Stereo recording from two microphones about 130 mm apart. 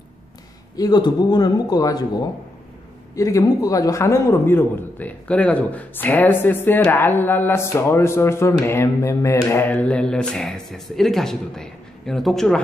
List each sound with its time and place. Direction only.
0.7 s a man's voice: 30° left (ahead or behind); by 12.5 s centre (ahead or behind)